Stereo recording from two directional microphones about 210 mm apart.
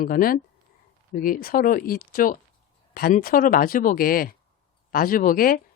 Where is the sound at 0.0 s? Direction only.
45° left (ahead or behind).